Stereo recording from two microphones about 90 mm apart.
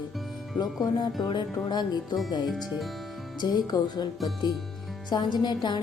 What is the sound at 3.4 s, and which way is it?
Speech, 50° left (ahead or behind).